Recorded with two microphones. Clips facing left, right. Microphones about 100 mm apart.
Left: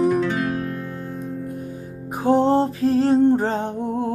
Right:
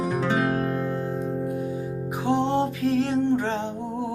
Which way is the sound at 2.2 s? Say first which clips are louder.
Left 6 dB; 40° left (ahead or behind).